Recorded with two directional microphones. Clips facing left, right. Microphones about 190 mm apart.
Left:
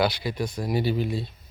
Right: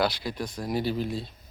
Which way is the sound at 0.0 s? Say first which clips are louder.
Left 3 dB; centre (ahead or behind).